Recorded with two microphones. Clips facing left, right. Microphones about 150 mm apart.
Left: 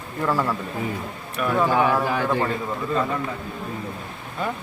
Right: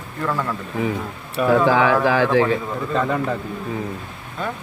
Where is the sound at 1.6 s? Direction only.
90° right.